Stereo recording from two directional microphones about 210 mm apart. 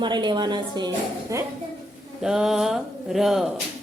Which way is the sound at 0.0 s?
20° right (ahead or behind).